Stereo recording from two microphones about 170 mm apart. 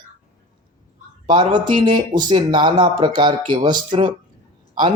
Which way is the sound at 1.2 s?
25° right (ahead or behind).